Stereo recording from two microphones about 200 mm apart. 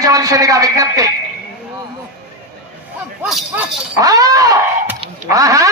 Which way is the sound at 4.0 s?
15° right (ahead or behind).